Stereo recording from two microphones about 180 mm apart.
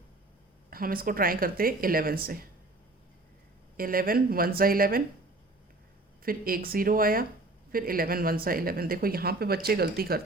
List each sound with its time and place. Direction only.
0.7 s speech: 55° right (ahead or behind)
3.8 s speech: 55° right (ahead or behind)
6.2 s speech: 55° right (ahead or behind)